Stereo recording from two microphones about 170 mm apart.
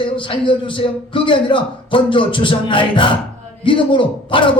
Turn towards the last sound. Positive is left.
turn(degrees=30)  # may be behind; listen again after turning